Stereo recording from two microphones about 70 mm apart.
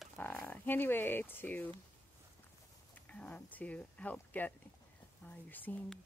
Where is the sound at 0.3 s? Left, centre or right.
Left.